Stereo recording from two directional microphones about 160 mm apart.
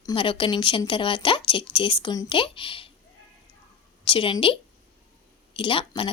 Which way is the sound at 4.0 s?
30° left (ahead or behind).